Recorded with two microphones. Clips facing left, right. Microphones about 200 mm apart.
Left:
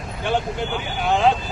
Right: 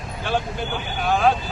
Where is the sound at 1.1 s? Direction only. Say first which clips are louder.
Left 1 dB; 20° left (ahead or behind).